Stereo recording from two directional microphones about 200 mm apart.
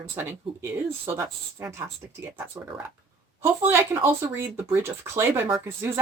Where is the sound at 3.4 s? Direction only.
10° right (ahead or behind).